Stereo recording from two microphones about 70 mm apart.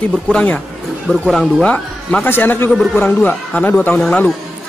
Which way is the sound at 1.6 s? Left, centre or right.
Centre.